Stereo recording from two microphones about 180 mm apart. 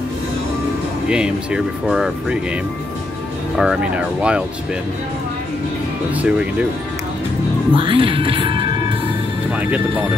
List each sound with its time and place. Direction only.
1.0 s speech: 5° right (ahead or behind)
3.5 s speech: 5° right (ahead or behind)
6.1 s speech: 5° right (ahead or behind)
7.7 s speech: 30° right (ahead or behind)
9.5 s speech: 10° right (ahead or behind)